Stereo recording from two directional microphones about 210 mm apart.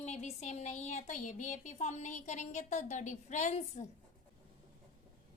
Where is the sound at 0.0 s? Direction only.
30° left (ahead or behind).